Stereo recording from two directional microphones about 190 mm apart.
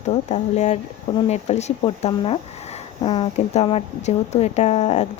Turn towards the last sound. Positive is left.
turn(degrees=35)  # may be behind; listen again after turning